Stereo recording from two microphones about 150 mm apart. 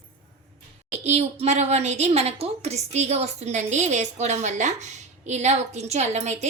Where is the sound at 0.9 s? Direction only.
45° right (ahead or behind).